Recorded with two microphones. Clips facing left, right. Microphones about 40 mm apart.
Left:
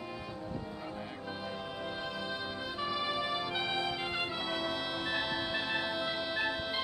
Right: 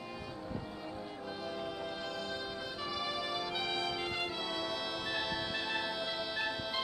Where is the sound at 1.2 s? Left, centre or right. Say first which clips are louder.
Right 1 dB; centre.